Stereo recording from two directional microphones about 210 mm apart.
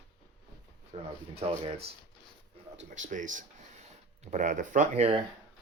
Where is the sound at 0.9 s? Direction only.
30° right (ahead or behind).